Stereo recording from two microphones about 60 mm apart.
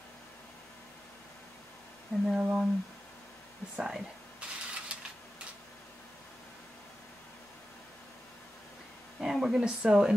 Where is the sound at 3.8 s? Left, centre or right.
Centre.